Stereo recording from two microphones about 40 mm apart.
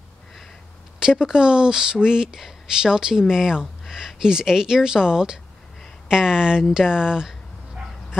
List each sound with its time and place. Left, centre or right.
0.9 s speech: centre
6.7 s dog: centre